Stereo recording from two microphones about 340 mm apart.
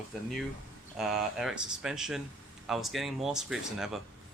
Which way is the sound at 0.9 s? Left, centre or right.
Centre.